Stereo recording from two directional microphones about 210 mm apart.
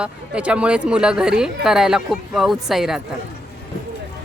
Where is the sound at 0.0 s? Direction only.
5° right (ahead or behind).